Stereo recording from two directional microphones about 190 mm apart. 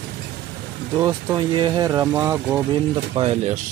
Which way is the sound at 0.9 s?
20° right (ahead or behind).